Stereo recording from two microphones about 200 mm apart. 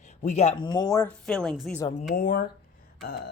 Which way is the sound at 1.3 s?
5° left (ahead or behind).